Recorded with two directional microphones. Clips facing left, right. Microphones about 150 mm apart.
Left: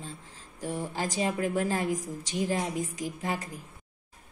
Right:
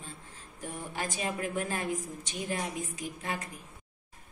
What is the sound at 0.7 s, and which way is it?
A woman's voice, 35° left (ahead or behind).